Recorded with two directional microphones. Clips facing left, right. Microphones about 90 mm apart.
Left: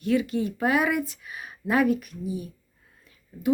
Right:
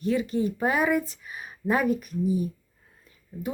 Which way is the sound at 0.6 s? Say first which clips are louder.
Left 1 dB; centre (ahead or behind).